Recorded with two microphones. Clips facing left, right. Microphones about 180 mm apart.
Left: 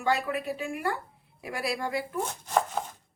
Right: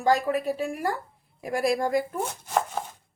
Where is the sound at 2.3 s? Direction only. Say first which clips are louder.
Even; 5° right (ahead or behind).